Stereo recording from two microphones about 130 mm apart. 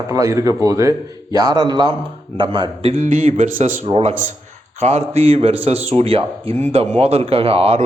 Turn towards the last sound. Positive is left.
turn(degrees=-50)  # may be behind; listen again after turning